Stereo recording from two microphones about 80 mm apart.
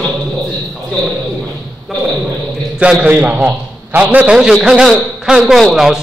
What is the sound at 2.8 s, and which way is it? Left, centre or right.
A man's voice, centre.